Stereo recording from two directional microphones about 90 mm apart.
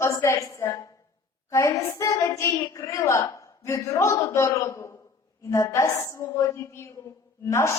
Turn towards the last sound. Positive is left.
turn(degrees=30)  # may be behind; listen again after turning